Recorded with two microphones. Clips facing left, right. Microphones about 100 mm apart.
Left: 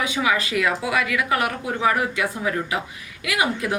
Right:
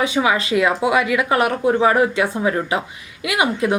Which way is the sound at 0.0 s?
30° right (ahead or behind).